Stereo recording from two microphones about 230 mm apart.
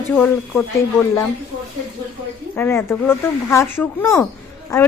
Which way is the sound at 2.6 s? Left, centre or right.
Centre.